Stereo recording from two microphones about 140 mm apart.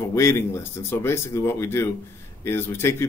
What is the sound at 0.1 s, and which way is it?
Speech, 20° left (ahead or behind).